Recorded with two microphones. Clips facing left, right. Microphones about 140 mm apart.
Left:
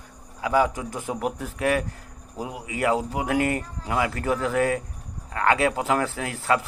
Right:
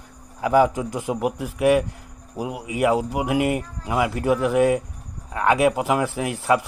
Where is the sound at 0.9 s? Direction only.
15° right (ahead or behind).